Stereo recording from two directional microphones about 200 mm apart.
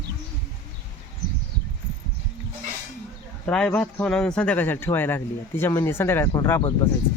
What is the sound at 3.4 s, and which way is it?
A man's voice, 5° left (ahead or behind).